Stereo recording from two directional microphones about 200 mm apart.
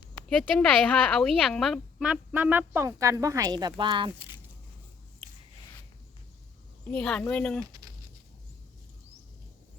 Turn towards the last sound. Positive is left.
turn(degrees=-20)  # may be behind; listen again after turning